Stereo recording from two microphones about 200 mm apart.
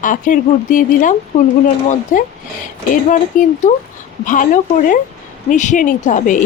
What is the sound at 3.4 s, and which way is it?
Speech, 40° left (ahead or behind).